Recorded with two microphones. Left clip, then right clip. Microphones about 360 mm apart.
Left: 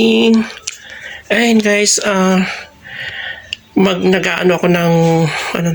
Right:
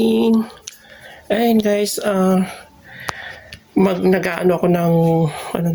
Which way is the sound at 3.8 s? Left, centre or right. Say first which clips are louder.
Left 3 dB; right.